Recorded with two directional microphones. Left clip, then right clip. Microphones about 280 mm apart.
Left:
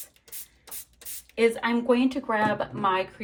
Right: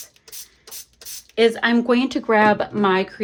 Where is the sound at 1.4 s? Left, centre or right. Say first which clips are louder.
Right 6 dB; right.